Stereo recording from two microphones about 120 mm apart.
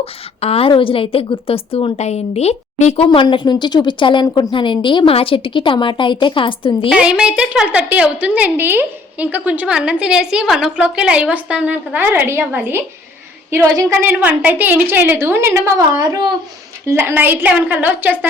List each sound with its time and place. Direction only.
0.0 s a woman's voice: 55° left (ahead or behind)
3.1 s a woman's voice: 40° left (ahead or behind)
6.9 s a woman's voice: 10° right (ahead or behind)